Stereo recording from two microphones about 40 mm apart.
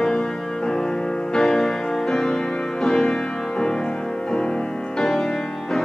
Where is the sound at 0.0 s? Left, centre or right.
Centre.